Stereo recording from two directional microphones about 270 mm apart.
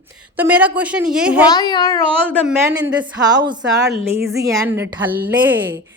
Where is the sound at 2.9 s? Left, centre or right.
Centre.